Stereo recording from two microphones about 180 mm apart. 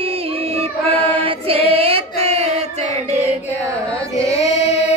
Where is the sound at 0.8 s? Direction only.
30° right (ahead or behind).